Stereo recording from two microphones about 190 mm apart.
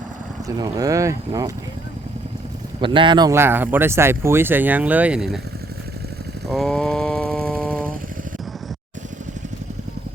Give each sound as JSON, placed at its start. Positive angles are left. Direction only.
{"t": 0.4, "sound": "speech", "side_deg": -20}
{"t": 2.8, "sound": "speech", "side_deg": -25}
{"t": 6.5, "sound": "a sound", "side_deg": 0}